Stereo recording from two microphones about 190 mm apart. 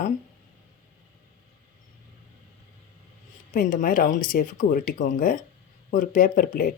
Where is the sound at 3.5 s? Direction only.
45° left (ahead or behind).